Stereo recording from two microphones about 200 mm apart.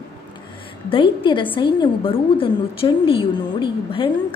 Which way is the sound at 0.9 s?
25° left (ahead or behind).